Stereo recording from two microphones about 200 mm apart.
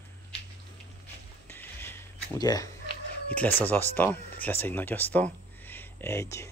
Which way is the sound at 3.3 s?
10° left (ahead or behind).